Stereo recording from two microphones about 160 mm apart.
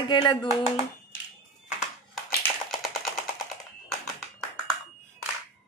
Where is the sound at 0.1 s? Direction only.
25° left (ahead or behind).